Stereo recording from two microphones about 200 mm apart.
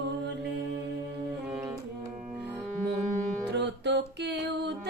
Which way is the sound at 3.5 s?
60° right (ahead or behind).